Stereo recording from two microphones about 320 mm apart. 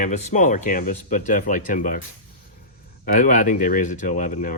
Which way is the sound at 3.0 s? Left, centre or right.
Left.